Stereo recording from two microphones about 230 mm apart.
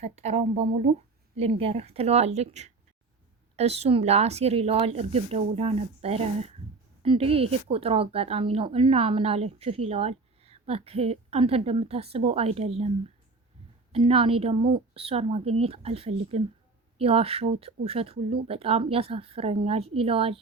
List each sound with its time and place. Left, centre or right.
0.0 s a woman's voice: right
13.9 s a woman's voice: right